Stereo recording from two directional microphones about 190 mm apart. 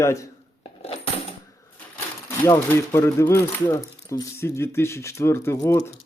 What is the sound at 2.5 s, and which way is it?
Speech, 15° left (ahead or behind).